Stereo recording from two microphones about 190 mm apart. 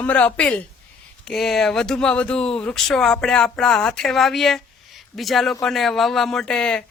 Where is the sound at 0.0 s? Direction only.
5° left (ahead or behind).